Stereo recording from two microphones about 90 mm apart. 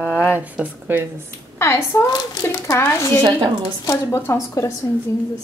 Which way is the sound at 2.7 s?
30° left (ahead or behind).